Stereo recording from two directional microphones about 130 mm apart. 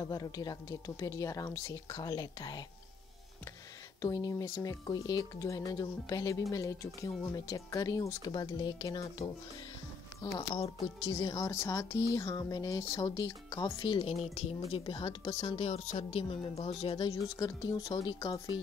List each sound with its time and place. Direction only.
0.0 s speech: 30° left (ahead or behind)
4.0 s speech: 25° left (ahead or behind)
11.1 s speech: 30° left (ahead or behind)
12.1 s speech: 30° left (ahead or behind)
13.8 s speech: 45° left (ahead or behind)
14.8 s speech: 40° left (ahead or behind)
17.1 s speech: 30° left (ahead or behind)